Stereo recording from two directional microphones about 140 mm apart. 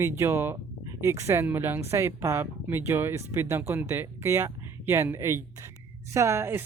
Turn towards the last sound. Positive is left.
turn(degrees=-15)  # may be behind; listen again after turning